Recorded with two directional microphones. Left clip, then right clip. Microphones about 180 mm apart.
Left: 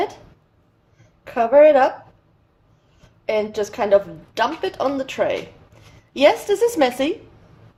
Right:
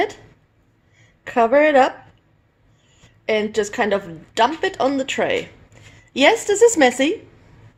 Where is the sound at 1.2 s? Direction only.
55° right (ahead or behind).